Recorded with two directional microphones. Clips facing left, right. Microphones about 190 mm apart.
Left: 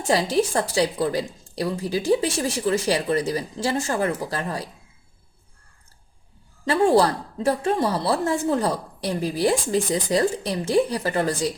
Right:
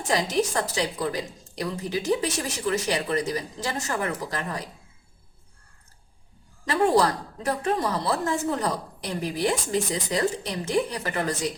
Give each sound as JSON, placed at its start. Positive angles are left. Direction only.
{"t": 0.1, "sound": "speech", "side_deg": 30}
{"t": 6.7, "sound": "speech", "side_deg": 30}